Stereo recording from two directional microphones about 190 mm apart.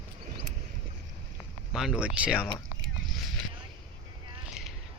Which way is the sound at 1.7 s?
Centre (ahead or behind).